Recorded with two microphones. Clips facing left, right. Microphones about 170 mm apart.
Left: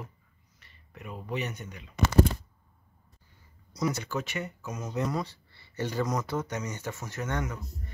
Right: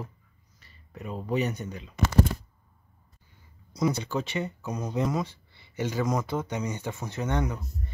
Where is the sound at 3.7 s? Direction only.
25° right (ahead or behind).